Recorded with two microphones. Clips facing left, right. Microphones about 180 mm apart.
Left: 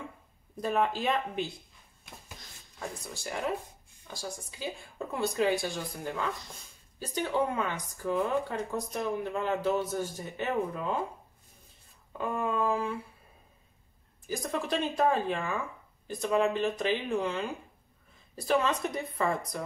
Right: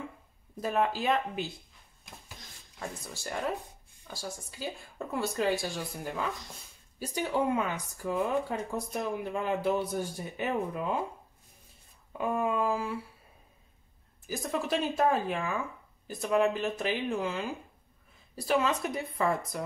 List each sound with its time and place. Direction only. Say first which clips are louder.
0.6 s speech: even; 5° right (ahead or behind)
2.8 s speech: left 1 dB; centre (ahead or behind)
12.1 s speech: right 2 dB; 10° right (ahead or behind)
14.2 s speech: even; 5° right (ahead or behind)